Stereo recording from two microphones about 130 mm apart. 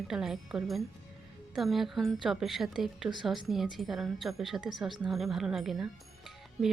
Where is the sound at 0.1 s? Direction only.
5° right (ahead or behind).